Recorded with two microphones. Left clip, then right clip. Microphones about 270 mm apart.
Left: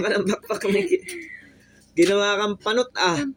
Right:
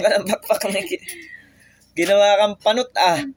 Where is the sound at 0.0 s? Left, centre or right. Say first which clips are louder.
Right 5 dB; right.